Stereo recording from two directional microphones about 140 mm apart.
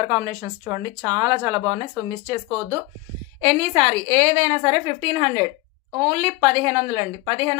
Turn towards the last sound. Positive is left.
turn(degrees=-35)  # may be behind; listen again after turning